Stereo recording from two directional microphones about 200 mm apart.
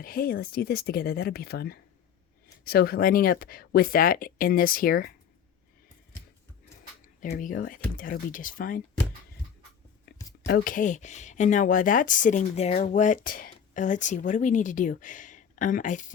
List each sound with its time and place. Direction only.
0.0 s speech: 45° left (ahead or behind)
7.2 s speech: 40° left (ahead or behind)
10.1 s a sound: 50° left (ahead or behind)
10.4 s speech: 45° left (ahead or behind)